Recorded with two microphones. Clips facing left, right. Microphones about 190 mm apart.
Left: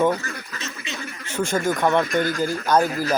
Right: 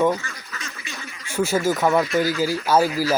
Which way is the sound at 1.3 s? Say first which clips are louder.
Right 2 dB; 5° right (ahead or behind).